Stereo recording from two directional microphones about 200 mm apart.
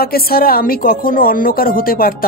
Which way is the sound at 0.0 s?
50° left (ahead or behind).